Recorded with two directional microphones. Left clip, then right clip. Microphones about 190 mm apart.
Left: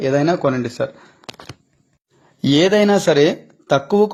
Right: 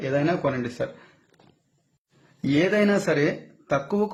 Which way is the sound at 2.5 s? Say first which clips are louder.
Left 8 dB; 25° left (ahead or behind).